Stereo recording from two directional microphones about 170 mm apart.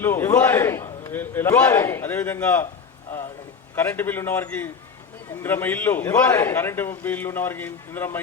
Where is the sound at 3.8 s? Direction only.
10° left (ahead or behind).